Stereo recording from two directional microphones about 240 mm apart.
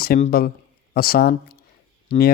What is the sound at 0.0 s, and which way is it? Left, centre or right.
A man's voice, left.